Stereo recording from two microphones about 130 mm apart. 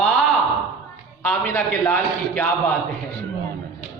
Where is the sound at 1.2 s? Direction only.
15° left (ahead or behind).